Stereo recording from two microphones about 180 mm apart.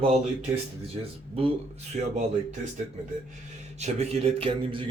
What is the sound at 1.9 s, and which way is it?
Speech, 40° right (ahead or behind).